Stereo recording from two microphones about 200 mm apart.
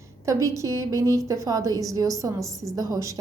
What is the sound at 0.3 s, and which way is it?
A woman's voice, 15° right (ahead or behind).